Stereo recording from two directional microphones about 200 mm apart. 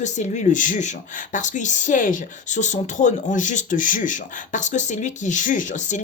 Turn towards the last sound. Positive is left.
turn(degrees=40)  # may be behind; listen again after turning